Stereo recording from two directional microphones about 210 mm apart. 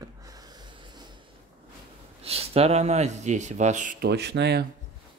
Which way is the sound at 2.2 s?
30° right (ahead or behind).